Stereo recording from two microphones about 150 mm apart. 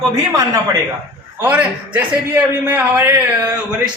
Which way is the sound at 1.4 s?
10° right (ahead or behind).